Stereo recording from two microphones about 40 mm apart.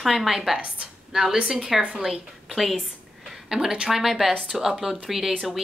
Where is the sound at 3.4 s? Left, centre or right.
Centre.